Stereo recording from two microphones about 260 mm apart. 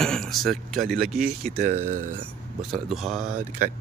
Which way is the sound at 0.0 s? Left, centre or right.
Centre.